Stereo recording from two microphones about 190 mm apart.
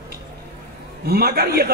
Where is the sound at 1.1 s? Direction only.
55° right (ahead or behind).